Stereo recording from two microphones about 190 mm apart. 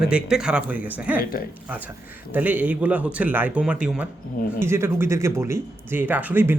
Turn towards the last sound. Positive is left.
turn(degrees=-10)  # may be behind; listen again after turning